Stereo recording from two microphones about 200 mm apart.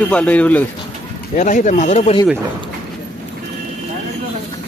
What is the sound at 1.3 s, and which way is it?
Speech, 40° left (ahead or behind).